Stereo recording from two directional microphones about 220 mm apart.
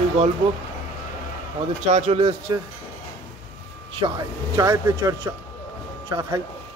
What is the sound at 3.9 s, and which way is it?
Speech, 20° right (ahead or behind).